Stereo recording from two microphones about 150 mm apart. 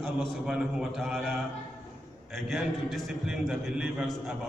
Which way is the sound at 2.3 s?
Centre (ahead or behind).